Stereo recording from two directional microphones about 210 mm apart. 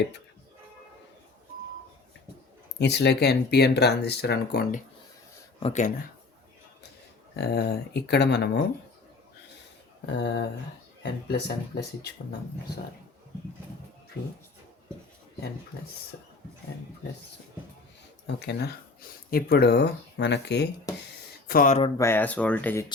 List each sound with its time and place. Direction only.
2.7 s speech: 55° left (ahead or behind)
5.6 s speech: 35° left (ahead or behind)
7.3 s speech: 50° left (ahead or behind)
10.1 s speech: 55° left (ahead or behind)
18.3 s speech: 50° left (ahead or behind)
21.4 s speech: 45° left (ahead or behind)
21.9 s speech: 10° left (ahead or behind)